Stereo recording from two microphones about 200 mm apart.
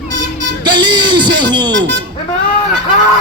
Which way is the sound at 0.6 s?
20° right (ahead or behind).